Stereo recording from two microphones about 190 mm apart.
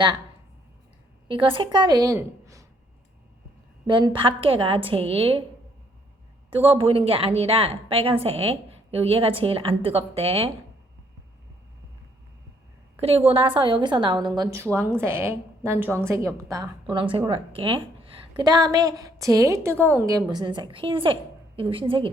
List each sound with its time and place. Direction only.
1.3 s a woman's voice: 25° right (ahead or behind)
3.8 s a woman's voice: 25° right (ahead or behind)
6.6 s a woman's voice: 30° right (ahead or behind)
13.0 s a woman's voice: 30° right (ahead or behind)